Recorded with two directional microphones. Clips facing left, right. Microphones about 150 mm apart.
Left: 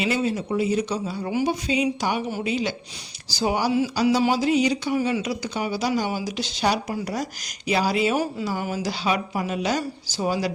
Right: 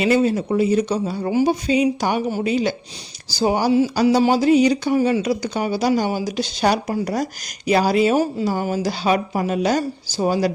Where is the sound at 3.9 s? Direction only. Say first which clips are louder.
Right 4 dB; 45° right (ahead or behind).